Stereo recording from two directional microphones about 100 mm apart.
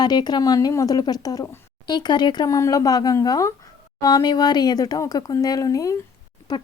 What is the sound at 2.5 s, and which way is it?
A woman's voice, 30° left (ahead or behind).